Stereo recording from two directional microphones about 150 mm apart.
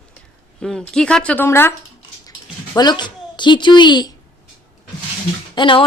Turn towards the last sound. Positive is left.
turn(degrees=35)  # may be behind; listen again after turning